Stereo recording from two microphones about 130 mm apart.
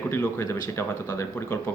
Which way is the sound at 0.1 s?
20° left (ahead or behind).